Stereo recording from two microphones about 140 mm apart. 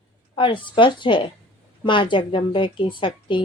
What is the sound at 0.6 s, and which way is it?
A woman's voice, 35° left (ahead or behind).